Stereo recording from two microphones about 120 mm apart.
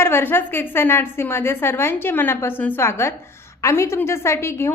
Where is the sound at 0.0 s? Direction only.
20° left (ahead or behind).